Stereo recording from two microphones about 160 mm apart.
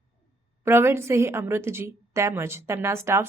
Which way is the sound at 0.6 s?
15° right (ahead or behind).